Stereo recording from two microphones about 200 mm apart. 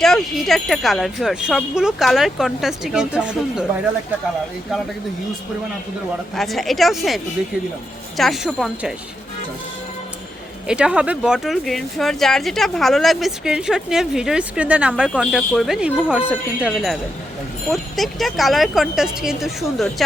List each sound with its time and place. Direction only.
0.0 s speech: centre (ahead or behind)
6.3 s speech: centre (ahead or behind)
10.7 s speech: 5° right (ahead or behind)